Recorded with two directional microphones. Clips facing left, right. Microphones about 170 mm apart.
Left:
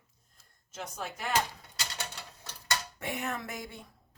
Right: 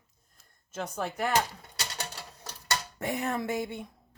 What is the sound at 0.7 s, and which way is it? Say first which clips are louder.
Speech: right 6 dB; 60° right (ahead or behind).